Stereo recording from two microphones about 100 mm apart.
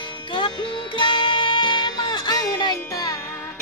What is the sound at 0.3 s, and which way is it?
Music, 55° left (ahead or behind).